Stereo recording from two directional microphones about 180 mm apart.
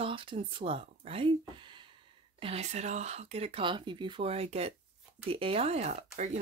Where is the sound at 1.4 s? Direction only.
25° right (ahead or behind).